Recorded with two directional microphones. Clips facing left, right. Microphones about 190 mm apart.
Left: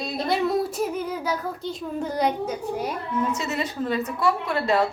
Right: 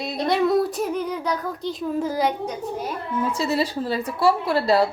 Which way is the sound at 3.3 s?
30° right (ahead or behind).